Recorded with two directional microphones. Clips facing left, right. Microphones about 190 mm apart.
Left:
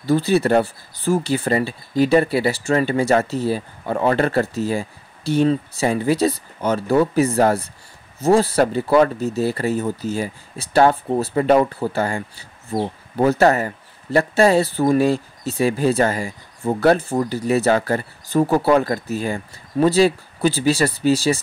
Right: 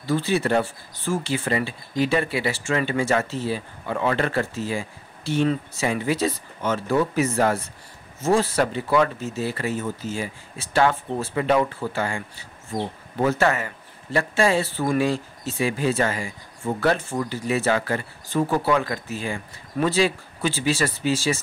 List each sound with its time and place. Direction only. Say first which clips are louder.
0.0 s speech: left 5 dB; 40° left (ahead or behind)
13.2 s speech: left 6 dB; 35° left (ahead or behind)